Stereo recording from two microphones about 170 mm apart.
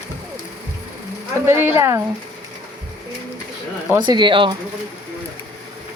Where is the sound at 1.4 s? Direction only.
15° right (ahead or behind).